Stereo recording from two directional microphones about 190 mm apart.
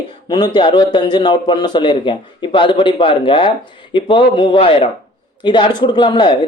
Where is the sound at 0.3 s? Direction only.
20° left (ahead or behind).